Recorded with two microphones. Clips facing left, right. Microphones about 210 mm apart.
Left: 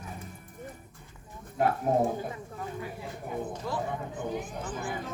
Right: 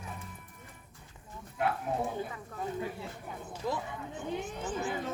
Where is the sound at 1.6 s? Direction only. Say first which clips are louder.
Left 5 dB; 40° left (ahead or behind).